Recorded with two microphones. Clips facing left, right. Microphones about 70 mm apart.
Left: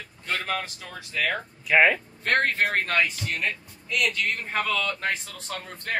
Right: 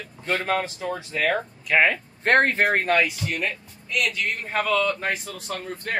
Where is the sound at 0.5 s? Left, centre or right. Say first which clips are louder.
Right 6 dB; right.